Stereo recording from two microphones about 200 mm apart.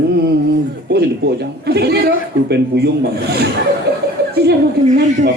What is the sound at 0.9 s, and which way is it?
A man's voice, 55° right (ahead or behind).